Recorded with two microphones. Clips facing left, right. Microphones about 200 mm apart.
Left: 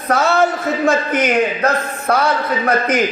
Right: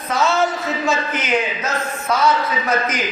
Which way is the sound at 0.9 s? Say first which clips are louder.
Left 5 dB; 55° left (ahead or behind).